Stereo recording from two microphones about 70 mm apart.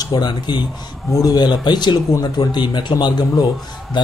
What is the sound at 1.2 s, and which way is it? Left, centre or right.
Speech, left.